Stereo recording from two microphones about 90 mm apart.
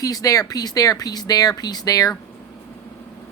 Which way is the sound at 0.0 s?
40° left (ahead or behind).